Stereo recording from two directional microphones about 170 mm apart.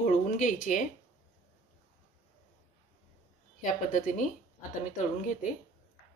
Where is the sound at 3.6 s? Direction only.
50° left (ahead or behind).